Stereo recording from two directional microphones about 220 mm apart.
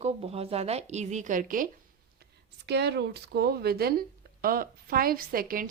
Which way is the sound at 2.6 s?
50° right (ahead or behind).